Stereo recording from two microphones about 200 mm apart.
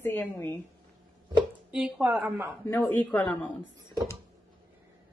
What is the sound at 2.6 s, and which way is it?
Speech, 10° left (ahead or behind).